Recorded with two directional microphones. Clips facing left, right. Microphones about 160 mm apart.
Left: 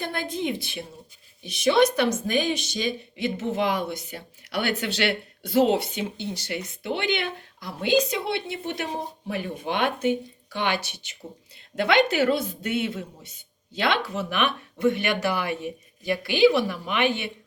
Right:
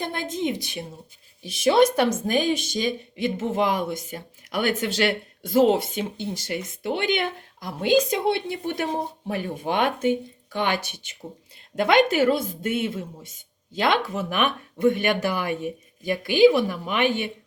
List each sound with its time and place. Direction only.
1.6 s speech: 50° right (ahead or behind)